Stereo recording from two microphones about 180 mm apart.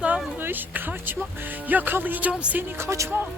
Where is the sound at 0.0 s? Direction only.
5° right (ahead or behind).